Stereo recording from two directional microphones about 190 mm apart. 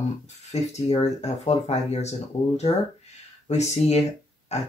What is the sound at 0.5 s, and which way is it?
Speech, 35° left (ahead or behind).